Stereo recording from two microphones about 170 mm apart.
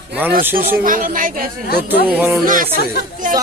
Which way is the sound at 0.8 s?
55° right (ahead or behind).